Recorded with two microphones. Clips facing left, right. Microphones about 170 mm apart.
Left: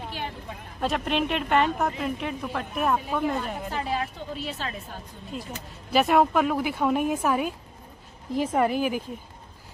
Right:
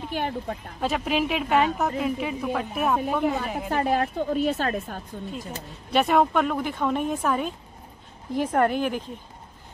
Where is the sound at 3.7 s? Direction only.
50° right (ahead or behind).